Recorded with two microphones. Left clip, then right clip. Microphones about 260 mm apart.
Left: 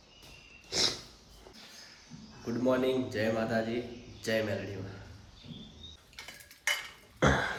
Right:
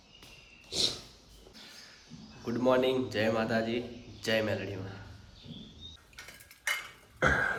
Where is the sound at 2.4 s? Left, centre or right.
Centre.